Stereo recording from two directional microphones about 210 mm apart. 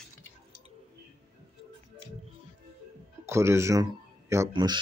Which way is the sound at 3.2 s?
15° right (ahead or behind).